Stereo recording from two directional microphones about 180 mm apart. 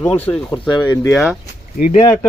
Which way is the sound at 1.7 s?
45° left (ahead or behind).